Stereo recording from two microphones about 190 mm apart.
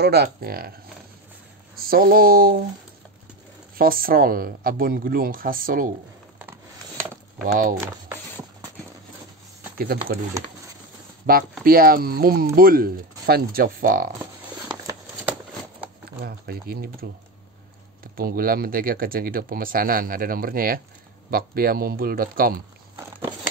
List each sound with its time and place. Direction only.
0.0 s speech: 55° right (ahead or behind)
1.8 s speech: 50° right (ahead or behind)
3.7 s speech: 50° right (ahead or behind)
9.8 s speech: 50° right (ahead or behind)
11.3 s speech: 50° right (ahead or behind)
14.7 s a sound: 25° right (ahead or behind)
16.3 s speech: 55° right (ahead or behind)
18.1 s speech: 50° right (ahead or behind)